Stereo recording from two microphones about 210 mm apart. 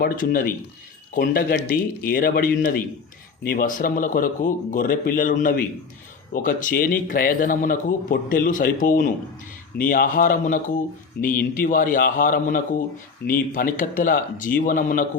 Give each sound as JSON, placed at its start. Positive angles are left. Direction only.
{"t": 0.0, "sound": "speech", "side_deg": 45}